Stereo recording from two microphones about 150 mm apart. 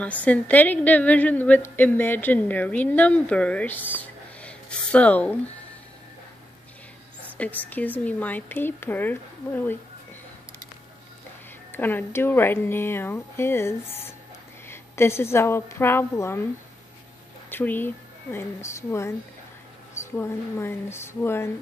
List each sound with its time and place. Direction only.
0.0 s a woman's voice: 10° left (ahead or behind)
7.3 s a woman's voice: 10° left (ahead or behind)
11.7 s a woman's voice: 15° left (ahead or behind)
17.5 s a woman's voice: 15° left (ahead or behind)